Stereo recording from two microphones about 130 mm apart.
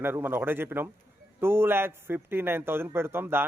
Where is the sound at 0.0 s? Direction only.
15° right (ahead or behind).